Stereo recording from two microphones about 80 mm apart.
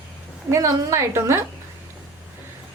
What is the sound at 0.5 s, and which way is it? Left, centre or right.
Speech, right.